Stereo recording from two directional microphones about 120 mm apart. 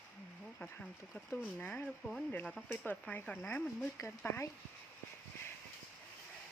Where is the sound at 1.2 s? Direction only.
15° left (ahead or behind).